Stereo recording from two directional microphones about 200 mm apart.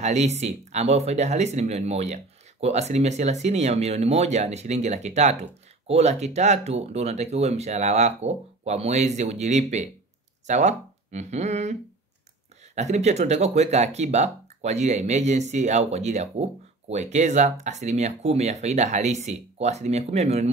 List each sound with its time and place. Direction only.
0.0 s speech: 35° right (ahead or behind)